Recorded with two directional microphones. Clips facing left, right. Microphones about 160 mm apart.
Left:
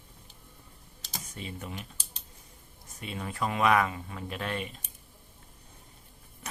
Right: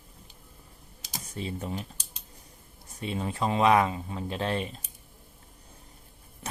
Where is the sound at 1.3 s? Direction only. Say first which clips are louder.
Right 7 dB; 35° right (ahead or behind).